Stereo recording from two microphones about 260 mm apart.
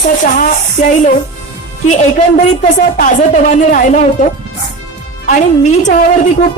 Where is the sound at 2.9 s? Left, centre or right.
Left.